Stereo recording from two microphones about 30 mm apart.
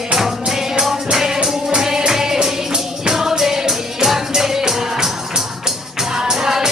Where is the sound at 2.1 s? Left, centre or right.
Centre.